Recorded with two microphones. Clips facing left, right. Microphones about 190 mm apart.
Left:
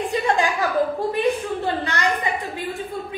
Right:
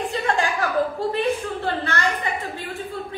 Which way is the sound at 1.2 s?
15° left (ahead or behind).